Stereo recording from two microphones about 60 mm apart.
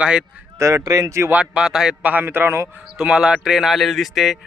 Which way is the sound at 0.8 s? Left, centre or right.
Right.